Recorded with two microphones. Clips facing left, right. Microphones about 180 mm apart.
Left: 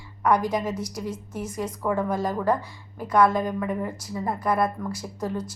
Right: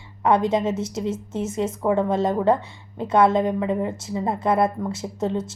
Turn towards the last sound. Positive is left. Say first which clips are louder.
# right 5 dB
turn(degrees=-25)  # may be behind; listen again after turning